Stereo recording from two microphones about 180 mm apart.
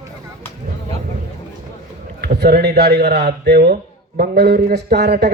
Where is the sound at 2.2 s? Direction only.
60° right (ahead or behind).